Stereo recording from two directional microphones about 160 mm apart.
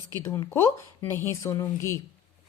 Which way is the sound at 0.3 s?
15° left (ahead or behind).